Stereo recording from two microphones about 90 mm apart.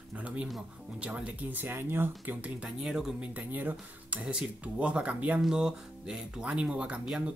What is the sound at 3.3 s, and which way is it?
Speech, 20° right (ahead or behind).